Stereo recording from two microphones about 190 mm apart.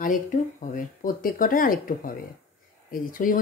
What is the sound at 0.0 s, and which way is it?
Speech, 45° left (ahead or behind).